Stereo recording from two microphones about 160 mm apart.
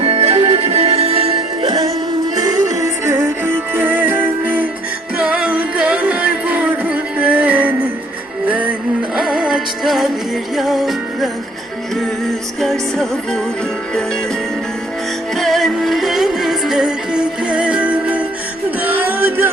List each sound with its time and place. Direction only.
0.0 s music: 40° right (ahead or behind); by 13.4 s centre (ahead or behind)
15.4 s music: centre (ahead or behind)